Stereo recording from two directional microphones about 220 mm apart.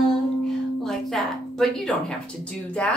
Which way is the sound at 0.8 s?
Centre (ahead or behind).